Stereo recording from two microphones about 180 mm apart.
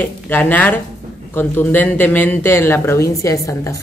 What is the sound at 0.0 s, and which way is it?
Speech, 10° left (ahead or behind).